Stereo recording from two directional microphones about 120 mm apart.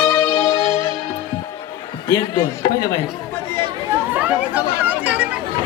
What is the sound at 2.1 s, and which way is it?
Speech, 35° left (ahead or behind).